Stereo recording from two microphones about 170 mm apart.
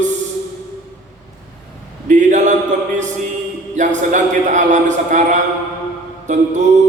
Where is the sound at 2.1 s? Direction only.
45° right (ahead or behind).